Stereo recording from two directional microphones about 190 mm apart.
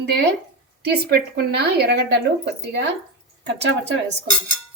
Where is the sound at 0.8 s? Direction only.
55° right (ahead or behind).